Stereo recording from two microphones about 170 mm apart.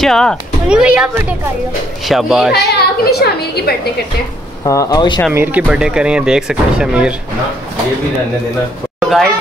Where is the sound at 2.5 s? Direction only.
75° left (ahead or behind).